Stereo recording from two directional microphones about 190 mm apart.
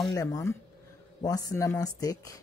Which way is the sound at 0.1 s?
20° left (ahead or behind).